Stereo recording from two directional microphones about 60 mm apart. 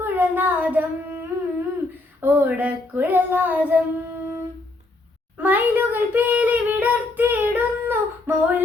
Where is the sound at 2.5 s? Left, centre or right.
Right.